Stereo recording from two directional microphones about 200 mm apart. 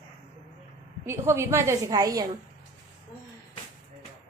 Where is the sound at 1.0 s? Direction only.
10° right (ahead or behind).